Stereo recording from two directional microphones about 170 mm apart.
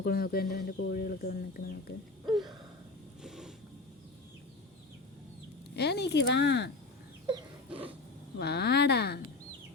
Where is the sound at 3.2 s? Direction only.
5° right (ahead or behind).